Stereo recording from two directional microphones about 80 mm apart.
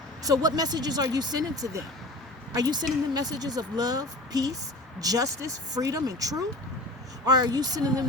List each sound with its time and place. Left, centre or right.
0.2 s speech: right